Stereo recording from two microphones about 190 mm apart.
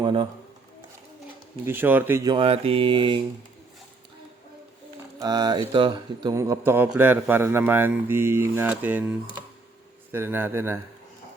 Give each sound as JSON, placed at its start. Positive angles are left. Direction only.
{"t": 0.0, "sound": "speech", "side_deg": -25}
{"t": 1.6, "sound": "speech", "side_deg": -10}
{"t": 2.3, "sound": "mantra", "side_deg": -30}
{"t": 5.2, "sound": "speech", "side_deg": -20}
{"t": 10.1, "sound": "speech", "side_deg": -10}